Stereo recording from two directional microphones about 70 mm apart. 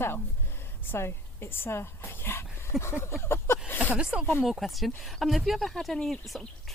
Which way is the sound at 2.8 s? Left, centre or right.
Left.